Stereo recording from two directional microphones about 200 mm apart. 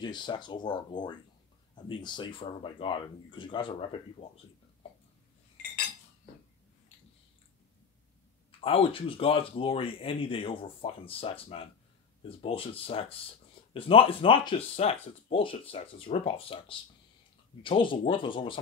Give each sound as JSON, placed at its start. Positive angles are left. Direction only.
{"t": 0.0, "sound": "speech", "side_deg": 20}
{"t": 8.5, "sound": "speech", "side_deg": 30}